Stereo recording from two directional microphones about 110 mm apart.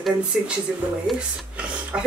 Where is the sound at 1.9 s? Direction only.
10° right (ahead or behind).